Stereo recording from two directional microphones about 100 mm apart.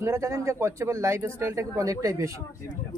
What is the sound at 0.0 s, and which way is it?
Speech, 25° right (ahead or behind).